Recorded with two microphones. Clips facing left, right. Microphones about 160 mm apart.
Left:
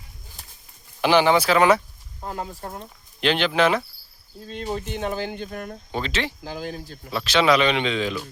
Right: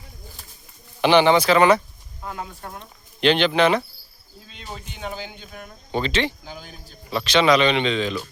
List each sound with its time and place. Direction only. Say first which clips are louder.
1.0 s speech: right 2 dB; 5° left (ahead or behind)
2.2 s speech: left 2 dB; 35° left (ahead or behind)
3.2 s speech: right 3 dB; 5° left (ahead or behind)
4.4 s speech: left 10 dB; 45° left (ahead or behind)
5.9 s speech: right 5 dB; centre (ahead or behind)
6.4 s speech: left 8 dB; 90° left
7.1 s speech: right 2 dB; centre (ahead or behind)